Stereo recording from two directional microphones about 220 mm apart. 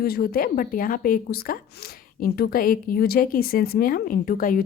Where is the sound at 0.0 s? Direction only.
45° left (ahead or behind).